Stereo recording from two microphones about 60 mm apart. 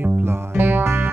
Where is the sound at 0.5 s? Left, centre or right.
Right.